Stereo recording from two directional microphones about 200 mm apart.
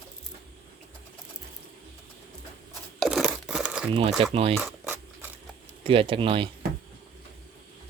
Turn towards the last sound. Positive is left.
turn(degrees=-25)  # may be behind; listen again after turning